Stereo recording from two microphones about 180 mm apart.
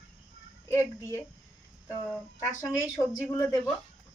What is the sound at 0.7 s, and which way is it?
Speech, 15° left (ahead or behind).